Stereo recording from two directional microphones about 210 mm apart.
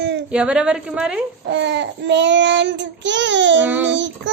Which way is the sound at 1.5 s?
55° right (ahead or behind).